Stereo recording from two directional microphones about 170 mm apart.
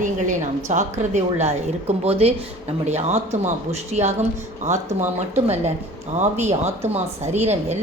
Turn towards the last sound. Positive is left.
turn(degrees=-40)  # may be behind; listen again after turning